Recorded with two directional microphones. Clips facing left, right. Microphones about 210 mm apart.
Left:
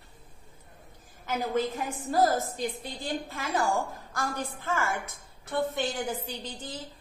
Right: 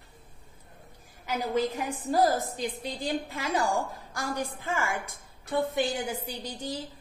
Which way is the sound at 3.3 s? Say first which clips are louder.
Left 2 dB; 50° left (ahead or behind).